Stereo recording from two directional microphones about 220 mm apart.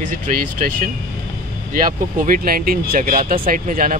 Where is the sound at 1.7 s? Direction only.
40° right (ahead or behind).